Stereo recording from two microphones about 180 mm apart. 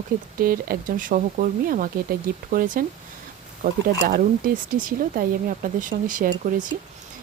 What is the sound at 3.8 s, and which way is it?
Speech, 55° right (ahead or behind).